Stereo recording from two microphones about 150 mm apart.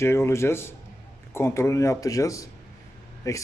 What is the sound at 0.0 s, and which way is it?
Speech, 15° left (ahead or behind).